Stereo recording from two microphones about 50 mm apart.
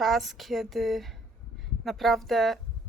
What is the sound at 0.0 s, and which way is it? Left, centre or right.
Speech, centre.